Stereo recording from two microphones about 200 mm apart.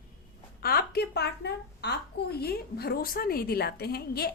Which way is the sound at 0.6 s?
50° left (ahead or behind).